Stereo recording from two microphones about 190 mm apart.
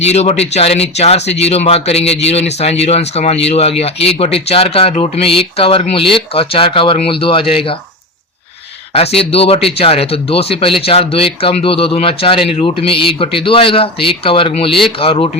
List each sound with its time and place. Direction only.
0.0 s speech: 35° left (ahead or behind)
8.9 s speech: 30° left (ahead or behind)